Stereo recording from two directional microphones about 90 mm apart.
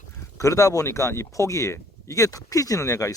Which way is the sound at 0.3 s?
35° left (ahead or behind).